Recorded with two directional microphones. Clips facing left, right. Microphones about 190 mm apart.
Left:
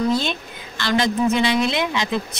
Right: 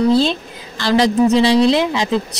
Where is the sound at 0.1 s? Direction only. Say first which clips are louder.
Right 7 dB; 35° right (ahead or behind).